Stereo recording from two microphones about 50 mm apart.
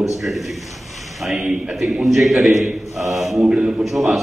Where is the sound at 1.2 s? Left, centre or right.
Centre.